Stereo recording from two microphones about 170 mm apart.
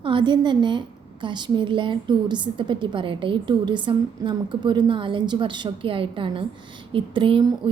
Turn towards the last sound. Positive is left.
turn(degrees=-30)  # may be behind; listen again after turning